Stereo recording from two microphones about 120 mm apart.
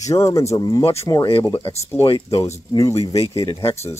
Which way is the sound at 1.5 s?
50° left (ahead or behind).